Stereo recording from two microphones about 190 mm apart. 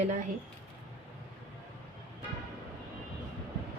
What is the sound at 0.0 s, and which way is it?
Speech, 40° right (ahead or behind).